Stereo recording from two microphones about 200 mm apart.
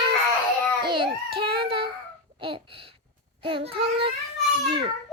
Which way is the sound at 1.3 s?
25° right (ahead or behind).